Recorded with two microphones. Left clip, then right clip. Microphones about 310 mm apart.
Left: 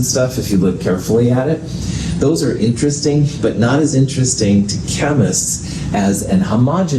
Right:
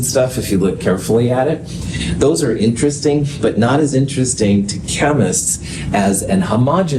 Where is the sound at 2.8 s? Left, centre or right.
Right.